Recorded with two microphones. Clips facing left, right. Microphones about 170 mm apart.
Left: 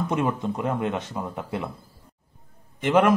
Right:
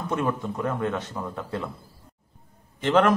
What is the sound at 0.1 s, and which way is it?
Speech, 20° left (ahead or behind).